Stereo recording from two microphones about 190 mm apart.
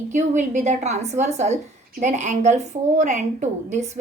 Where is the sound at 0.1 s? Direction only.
40° right (ahead or behind).